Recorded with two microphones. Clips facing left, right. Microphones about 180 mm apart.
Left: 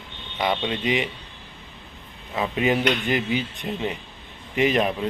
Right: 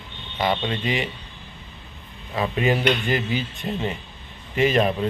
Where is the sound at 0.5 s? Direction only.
Centre (ahead or behind).